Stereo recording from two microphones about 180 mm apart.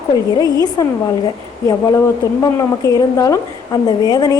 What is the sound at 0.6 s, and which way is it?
A woman's voice, 20° left (ahead or behind).